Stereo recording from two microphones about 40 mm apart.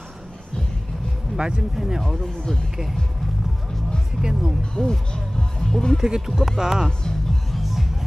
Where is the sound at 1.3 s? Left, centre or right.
Centre.